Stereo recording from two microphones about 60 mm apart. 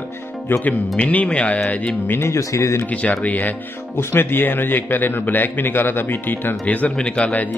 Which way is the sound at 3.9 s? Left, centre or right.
Left.